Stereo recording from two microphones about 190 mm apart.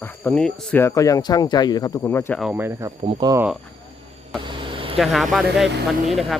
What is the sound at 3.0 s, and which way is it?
Speech, 30° right (ahead or behind).